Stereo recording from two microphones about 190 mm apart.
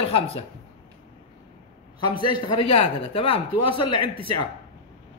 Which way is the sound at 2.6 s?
30° left (ahead or behind).